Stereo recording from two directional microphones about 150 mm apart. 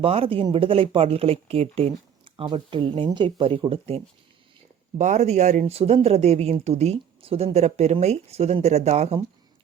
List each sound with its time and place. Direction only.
0.0 s speech: 40° right (ahead or behind)
4.9 s speech: 50° right (ahead or behind)